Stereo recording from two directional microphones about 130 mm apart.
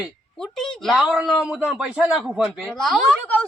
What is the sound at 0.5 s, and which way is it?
A woman's voice, 5° left (ahead or behind).